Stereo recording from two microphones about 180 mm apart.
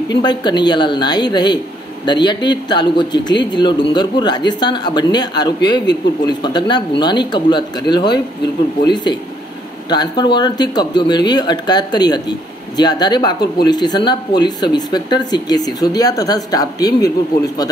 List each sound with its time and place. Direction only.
0.2 s a man's voice: 25° left (ahead or behind)